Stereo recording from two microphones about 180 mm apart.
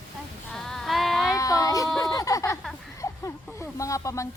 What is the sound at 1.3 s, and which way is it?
Speech, 20° left (ahead or behind).